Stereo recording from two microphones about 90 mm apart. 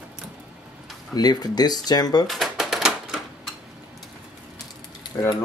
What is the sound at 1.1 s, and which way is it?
Speech, 50° left (ahead or behind).